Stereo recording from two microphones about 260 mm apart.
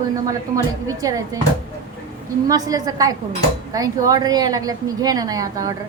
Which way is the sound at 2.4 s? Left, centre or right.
Centre.